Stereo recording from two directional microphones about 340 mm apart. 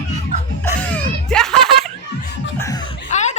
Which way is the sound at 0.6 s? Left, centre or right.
Centre.